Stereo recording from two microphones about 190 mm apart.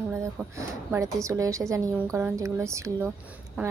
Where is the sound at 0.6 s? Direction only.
15° right (ahead or behind).